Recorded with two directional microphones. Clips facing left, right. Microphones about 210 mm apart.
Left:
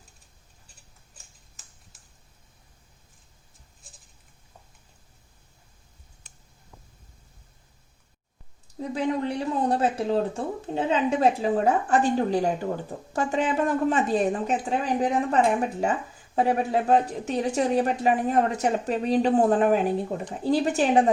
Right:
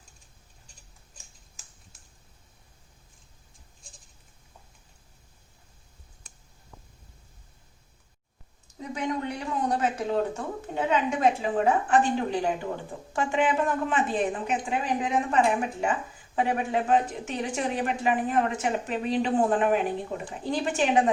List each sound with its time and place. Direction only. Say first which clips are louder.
8.8 s speech: left 4 dB; 30° left (ahead or behind)